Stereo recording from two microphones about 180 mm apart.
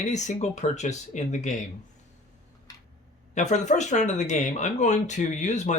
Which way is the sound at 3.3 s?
40° left (ahead or behind).